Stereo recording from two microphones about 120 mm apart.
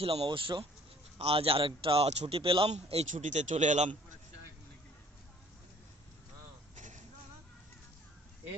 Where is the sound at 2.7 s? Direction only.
65° right (ahead or behind).